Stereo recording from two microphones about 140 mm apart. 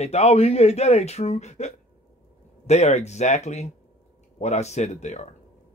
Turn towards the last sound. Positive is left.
turn(degrees=55)  # may be behind; listen again after turning